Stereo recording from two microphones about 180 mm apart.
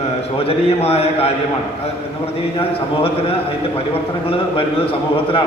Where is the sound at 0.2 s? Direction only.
35° left (ahead or behind).